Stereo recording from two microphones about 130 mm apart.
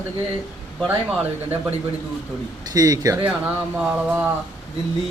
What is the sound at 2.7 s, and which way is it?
Speech, 30° right (ahead or behind).